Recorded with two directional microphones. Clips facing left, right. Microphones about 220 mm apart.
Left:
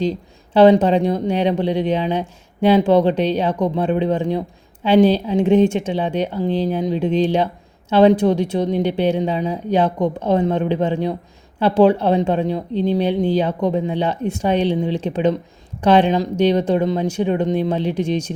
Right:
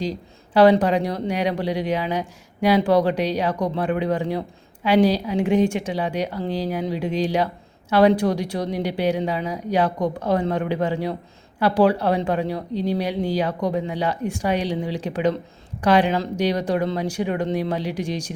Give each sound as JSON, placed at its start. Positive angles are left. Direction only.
{"t": 0.0, "sound": "speech", "side_deg": 25}